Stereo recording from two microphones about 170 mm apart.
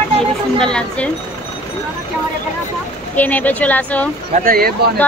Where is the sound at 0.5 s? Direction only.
5° left (ahead or behind).